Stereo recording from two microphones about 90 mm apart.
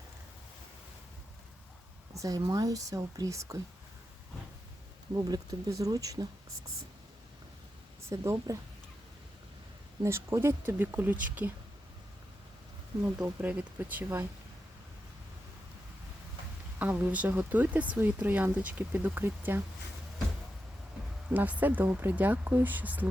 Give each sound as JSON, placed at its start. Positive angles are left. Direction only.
{"t": 2.1, "sound": "speech", "side_deg": -40}
{"t": 5.1, "sound": "speech", "side_deg": -45}
{"t": 8.1, "sound": "speech", "side_deg": -35}
{"t": 10.0, "sound": "speech", "side_deg": -30}
{"t": 13.4, "sound": "speech", "side_deg": -15}
{"t": 16.7, "sound": "speech", "side_deg": -20}
{"t": 21.2, "sound": "speech", "side_deg": -15}